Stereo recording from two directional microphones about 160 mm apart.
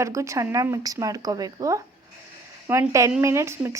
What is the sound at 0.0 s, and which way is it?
Speech, 20° right (ahead or behind).